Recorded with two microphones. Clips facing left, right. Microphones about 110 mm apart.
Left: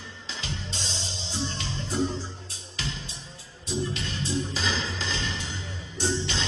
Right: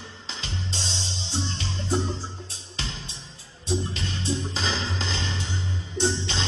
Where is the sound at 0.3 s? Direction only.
30° right (ahead or behind).